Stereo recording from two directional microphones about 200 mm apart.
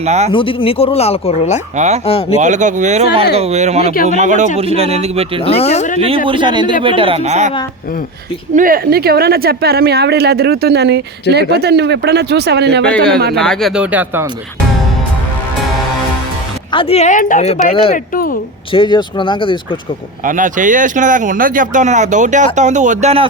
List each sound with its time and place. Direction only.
0.0 s speech: 35° right (ahead or behind)
0.3 s speech: 25° left (ahead or behind)
1.7 s speech: 35° right (ahead or behind)
5.4 s speech: 30° left (ahead or behind)
6.2 s speech: 25° right (ahead or behind)
8.5 s speech: 45° right (ahead or behind)
13.4 s speech: centre (ahead or behind)
16.7 s speech: 30° left (ahead or behind)
18.7 s speech: 25° left (ahead or behind)
20.2 s speech: 40° right (ahead or behind)